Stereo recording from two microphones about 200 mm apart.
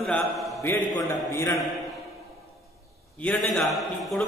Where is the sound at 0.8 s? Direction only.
20° left (ahead or behind).